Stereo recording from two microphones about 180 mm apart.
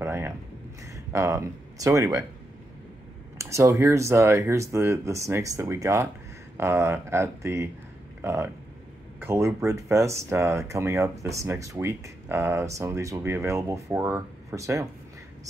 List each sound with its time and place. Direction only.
0.0 s a sound: 10° right (ahead or behind)
0.8 s speech: 15° right (ahead or behind)
3.3 s speech: 15° right (ahead or behind)